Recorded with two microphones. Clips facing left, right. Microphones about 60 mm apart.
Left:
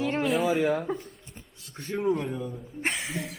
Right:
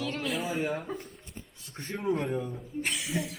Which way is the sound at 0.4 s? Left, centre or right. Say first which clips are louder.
Left 7 dB; left.